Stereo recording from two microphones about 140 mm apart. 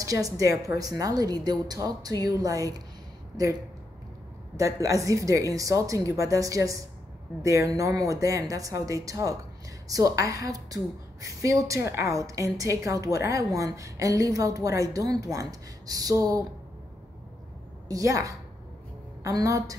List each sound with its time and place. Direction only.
0.0 s a woman's voice: 25° right (ahead or behind)
4.6 s a woman's voice: 25° right (ahead or behind)
17.8 s a woman's voice: 25° right (ahead or behind)